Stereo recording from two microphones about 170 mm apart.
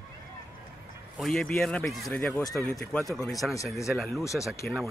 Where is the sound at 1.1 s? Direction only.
5° left (ahead or behind).